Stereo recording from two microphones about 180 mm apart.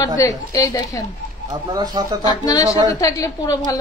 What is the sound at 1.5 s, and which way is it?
Speech, 20° right (ahead or behind).